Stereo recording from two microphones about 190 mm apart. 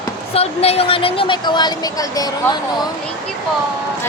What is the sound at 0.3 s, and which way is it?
A woman's voice, 30° left (ahead or behind).